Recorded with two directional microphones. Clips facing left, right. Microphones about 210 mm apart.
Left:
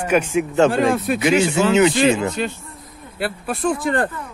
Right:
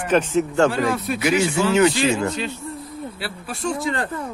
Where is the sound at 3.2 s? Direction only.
55° left (ahead or behind).